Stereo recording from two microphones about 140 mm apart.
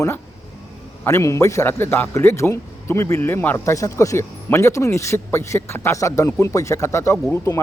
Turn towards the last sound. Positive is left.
turn(degrees=20)  # may be behind; listen again after turning